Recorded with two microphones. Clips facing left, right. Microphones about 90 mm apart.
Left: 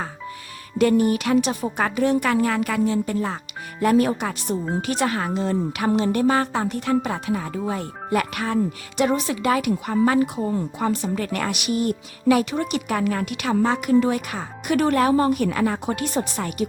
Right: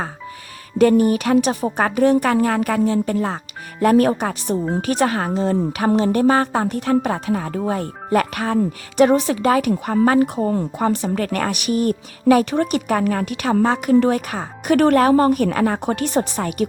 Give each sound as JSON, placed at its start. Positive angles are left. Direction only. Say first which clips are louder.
{"t": 0.8, "sound": "a woman's voice", "louder": "right 4 dB", "side_deg": -40}
{"t": 9.0, "sound": "speech", "louder": "right 7 dB", "side_deg": -60}
{"t": 9.4, "sound": "a woman's voice", "louder": "right 4 dB", "side_deg": -45}
{"t": 11.0, "sound": "a woman's voice", "louder": "right 4 dB", "side_deg": -60}